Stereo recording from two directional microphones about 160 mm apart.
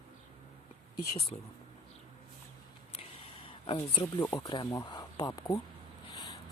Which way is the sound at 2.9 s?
35° left (ahead or behind).